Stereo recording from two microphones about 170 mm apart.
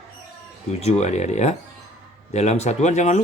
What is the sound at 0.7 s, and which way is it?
Speech, 40° left (ahead or behind).